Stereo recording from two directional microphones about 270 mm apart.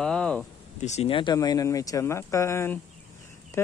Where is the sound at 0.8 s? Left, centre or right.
Left.